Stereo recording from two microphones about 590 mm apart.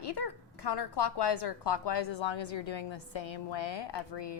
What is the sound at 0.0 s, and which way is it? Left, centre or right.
A woman's voice, left.